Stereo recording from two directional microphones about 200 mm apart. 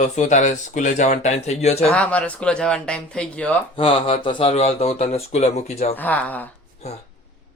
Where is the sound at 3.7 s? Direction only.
25° left (ahead or behind).